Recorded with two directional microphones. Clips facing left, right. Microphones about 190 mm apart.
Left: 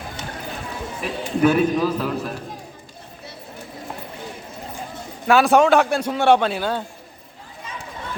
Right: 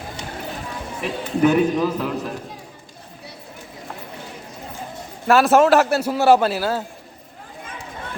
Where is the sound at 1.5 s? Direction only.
15° right (ahead or behind).